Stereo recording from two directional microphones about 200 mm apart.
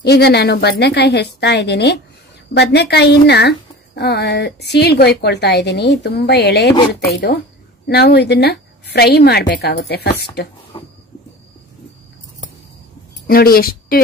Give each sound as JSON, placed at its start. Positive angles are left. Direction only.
{"t": 0.0, "sound": "a woman's voice", "side_deg": 55}
{"t": 7.8, "sound": "a woman's voice", "side_deg": 55}
{"t": 10.7, "sound": "a sound", "side_deg": 25}
{"t": 13.3, "sound": "speech", "side_deg": 50}